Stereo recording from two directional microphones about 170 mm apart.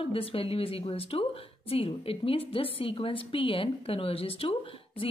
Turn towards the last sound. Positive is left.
turn(degrees=35)  # may be behind; listen again after turning